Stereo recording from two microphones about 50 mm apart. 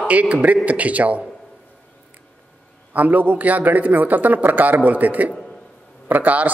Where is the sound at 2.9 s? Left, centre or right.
Right.